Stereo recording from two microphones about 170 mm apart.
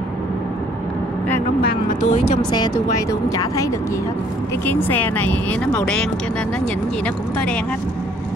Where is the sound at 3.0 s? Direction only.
20° left (ahead or behind).